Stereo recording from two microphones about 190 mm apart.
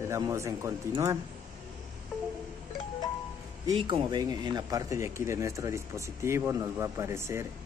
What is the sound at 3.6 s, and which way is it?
Speech, 25° right (ahead or behind).